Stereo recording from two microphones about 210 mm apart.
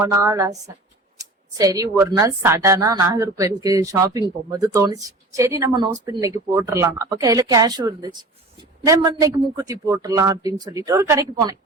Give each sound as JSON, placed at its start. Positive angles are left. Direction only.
{"t": 0.0, "sound": "speech", "side_deg": -15}